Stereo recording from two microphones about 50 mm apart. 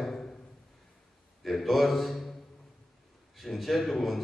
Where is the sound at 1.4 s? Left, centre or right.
Centre.